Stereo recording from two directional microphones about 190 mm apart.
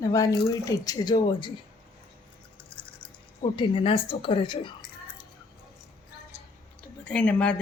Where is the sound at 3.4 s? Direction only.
30° left (ahead or behind).